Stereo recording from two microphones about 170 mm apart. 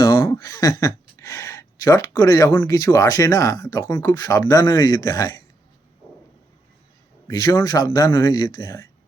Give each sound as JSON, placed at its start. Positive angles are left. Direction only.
{"t": 0.0, "sound": "speech", "side_deg": 20}
{"t": 7.3, "sound": "speech", "side_deg": 20}